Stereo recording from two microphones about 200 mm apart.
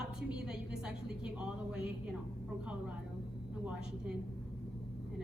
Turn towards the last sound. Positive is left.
turn(degrees=-5)  # may be behind; listen again after turning